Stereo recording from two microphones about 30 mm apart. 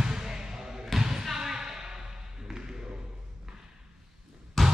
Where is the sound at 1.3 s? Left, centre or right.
Centre.